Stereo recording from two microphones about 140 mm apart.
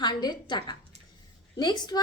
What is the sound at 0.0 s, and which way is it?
A woman's voice, 30° left (ahead or behind).